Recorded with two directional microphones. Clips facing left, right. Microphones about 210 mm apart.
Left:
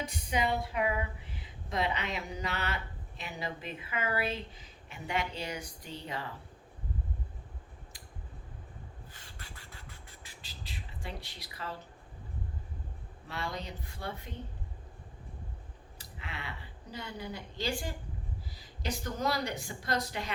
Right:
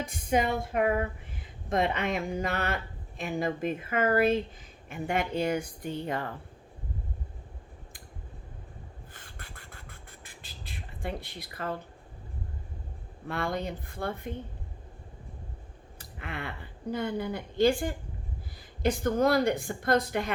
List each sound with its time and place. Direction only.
0.0 s speech: 50° right (ahead or behind)
9.1 s beatboxing: 55° right (ahead or behind)
13.2 s speech: 55° right (ahead or behind)
16.0 s a woman's voice: 55° right (ahead or behind)